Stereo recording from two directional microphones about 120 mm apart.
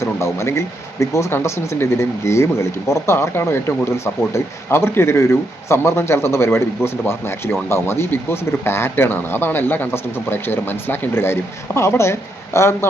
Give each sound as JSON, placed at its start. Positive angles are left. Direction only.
{"t": 0.0, "sound": "speech", "side_deg": 25}